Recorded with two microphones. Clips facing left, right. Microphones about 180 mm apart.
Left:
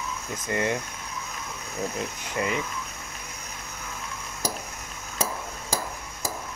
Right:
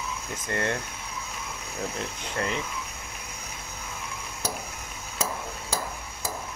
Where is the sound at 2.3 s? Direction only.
10° left (ahead or behind).